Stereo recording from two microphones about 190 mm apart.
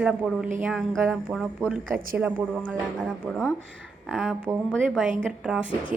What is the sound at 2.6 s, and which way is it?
A woman's voice, 5° left (ahead or behind).